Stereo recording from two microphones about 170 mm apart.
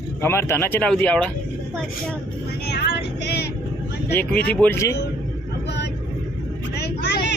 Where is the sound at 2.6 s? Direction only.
70° left (ahead or behind).